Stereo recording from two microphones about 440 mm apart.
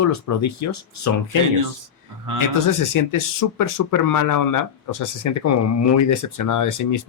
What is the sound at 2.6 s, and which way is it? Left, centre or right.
Speech, left.